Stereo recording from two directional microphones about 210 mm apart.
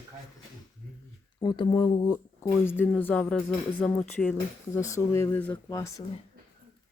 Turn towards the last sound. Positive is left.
turn(degrees=15)  # may be behind; listen again after turning